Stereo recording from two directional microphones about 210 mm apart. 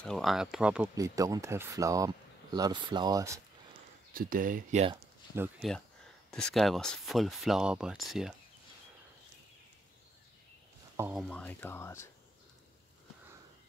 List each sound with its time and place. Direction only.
0.0 s speech: centre (ahead or behind)
0.9 s speech: 15° right (ahead or behind)
4.1 s speech: 40° right (ahead or behind)
6.3 s speech: 5° left (ahead or behind)
11.0 s speech: 10° right (ahead or behind)
11.2 s speech: 5° left (ahead or behind)